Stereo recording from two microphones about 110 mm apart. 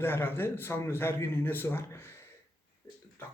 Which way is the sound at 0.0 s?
20° left (ahead or behind).